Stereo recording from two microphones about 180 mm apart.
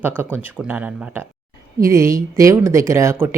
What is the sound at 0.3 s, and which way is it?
Speech, 10° right (ahead or behind).